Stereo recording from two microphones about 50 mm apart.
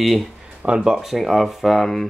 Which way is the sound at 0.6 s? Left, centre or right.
Centre.